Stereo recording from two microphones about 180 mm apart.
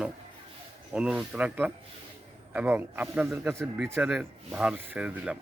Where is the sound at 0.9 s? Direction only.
5° right (ahead or behind).